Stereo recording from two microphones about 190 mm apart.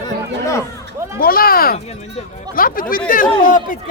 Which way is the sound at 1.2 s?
50° left (ahead or behind).